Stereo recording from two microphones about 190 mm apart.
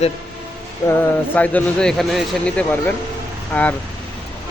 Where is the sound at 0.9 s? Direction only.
10° left (ahead or behind).